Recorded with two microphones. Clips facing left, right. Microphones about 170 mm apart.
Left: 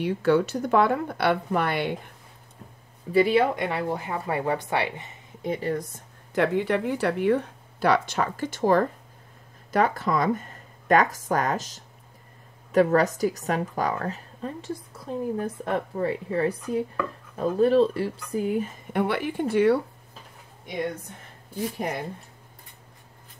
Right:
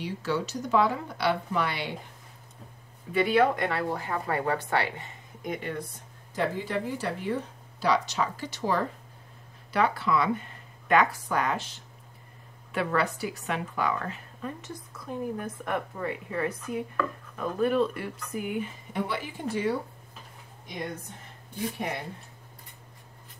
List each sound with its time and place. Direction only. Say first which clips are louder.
0.0 s speech: left 9 dB; 55° left (ahead or behind)
3.1 s a woman's voice: left 3 dB; 30° left (ahead or behind)
3.5 s speech: left 2 dB; 20° left (ahead or behind)
5.4 s a woman's voice: left 6 dB; 35° left (ahead or behind)
6.3 s a woman's voice: left 6 dB; 65° left (ahead or behind); by 18.7 s 35° left (ahead or behind)
18.9 s speech: left 7 dB; 60° left (ahead or behind)